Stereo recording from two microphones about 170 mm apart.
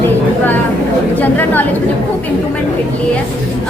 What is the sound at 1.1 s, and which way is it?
Speech, 10° left (ahead or behind).